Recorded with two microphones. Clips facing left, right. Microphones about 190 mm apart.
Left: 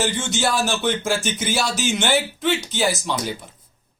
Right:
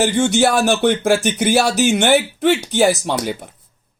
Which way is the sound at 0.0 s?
60° right (ahead or behind).